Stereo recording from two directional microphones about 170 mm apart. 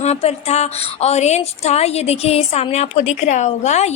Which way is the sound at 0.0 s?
40° left (ahead or behind).